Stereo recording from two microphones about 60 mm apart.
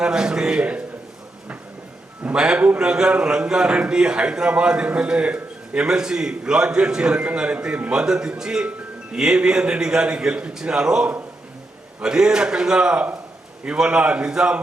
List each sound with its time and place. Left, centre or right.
0.0 s a man's voice: centre
2.3 s a man's voice: centre